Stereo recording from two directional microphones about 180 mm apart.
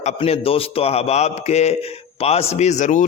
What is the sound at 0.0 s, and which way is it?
A man's voice, 35° left (ahead or behind).